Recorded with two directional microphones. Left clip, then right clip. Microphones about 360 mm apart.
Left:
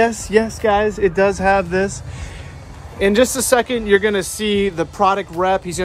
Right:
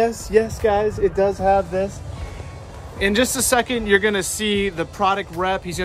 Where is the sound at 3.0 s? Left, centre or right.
Centre.